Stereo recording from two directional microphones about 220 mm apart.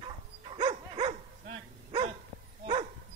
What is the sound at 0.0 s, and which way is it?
Dog, 25° right (ahead or behind).